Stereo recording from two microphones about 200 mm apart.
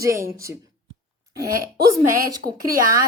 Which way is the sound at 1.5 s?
45° right (ahead or behind).